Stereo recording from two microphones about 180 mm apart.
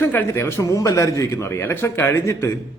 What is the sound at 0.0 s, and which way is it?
A man's voice, 10° left (ahead or behind).